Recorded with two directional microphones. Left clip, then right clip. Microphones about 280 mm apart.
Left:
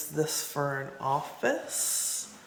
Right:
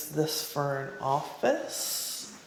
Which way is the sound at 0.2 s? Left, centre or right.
Centre.